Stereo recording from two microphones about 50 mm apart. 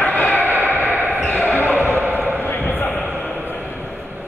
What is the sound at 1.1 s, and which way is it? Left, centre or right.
Basketball bounce, left.